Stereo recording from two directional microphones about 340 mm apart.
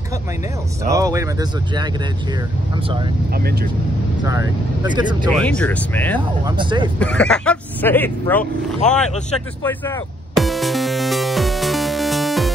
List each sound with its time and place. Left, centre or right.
0.9 s speech: centre
3.3 s speech: right
4.2 s speech: centre
5.3 s speech: centre
6.4 s speech: centre
7.0 s speech: centre
9.6 s music: centre